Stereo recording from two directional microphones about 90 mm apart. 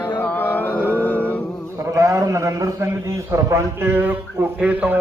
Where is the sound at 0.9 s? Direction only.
20° left (ahead or behind).